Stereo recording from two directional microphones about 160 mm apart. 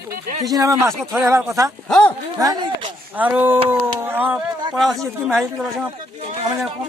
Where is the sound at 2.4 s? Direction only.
25° right (ahead or behind).